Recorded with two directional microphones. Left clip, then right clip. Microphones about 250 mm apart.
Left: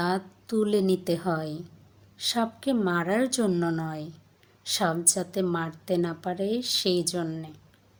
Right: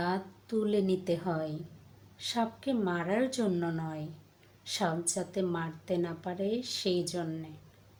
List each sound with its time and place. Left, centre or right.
0.0 s a woman's voice: left